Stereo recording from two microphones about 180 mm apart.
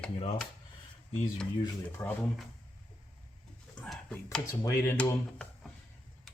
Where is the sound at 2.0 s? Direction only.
10° left (ahead or behind).